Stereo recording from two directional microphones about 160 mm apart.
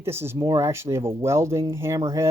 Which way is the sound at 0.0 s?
15° right (ahead or behind).